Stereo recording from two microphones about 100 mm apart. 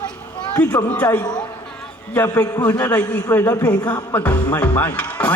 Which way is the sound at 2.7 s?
20° left (ahead or behind).